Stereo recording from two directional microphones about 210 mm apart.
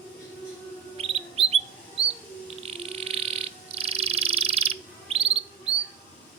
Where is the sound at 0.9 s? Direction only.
30° right (ahead or behind).